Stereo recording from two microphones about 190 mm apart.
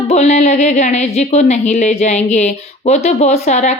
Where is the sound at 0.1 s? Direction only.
35° left (ahead or behind).